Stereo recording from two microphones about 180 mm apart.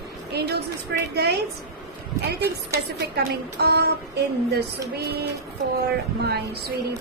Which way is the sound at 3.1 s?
60° right (ahead or behind).